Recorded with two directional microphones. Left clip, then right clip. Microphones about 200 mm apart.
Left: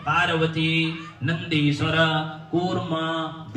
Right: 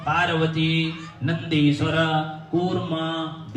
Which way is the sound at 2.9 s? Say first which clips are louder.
Left 1 dB; 15° left (ahead or behind).